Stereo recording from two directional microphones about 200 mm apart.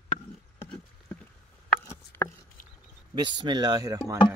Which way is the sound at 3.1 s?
20° right (ahead or behind).